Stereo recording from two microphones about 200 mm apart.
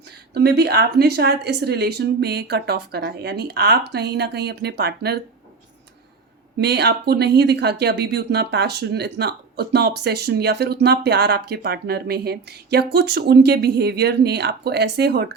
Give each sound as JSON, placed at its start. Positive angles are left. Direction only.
{"t": 0.3, "sound": "speech", "side_deg": -55}
{"t": 6.6, "sound": "speech", "side_deg": -55}